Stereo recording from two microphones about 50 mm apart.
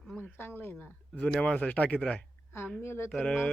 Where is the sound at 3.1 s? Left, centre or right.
Centre.